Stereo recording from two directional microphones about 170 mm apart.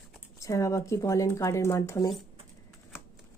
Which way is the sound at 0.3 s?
20° left (ahead or behind).